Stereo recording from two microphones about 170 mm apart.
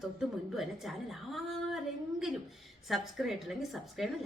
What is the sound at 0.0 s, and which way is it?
A woman's voice, centre (ahead or behind).